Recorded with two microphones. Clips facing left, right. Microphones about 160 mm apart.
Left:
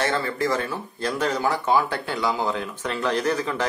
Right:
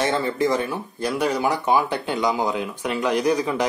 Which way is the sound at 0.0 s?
20° right (ahead or behind).